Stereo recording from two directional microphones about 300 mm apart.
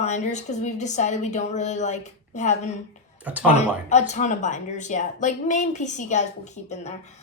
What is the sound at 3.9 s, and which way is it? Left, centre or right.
A woman's voice, left.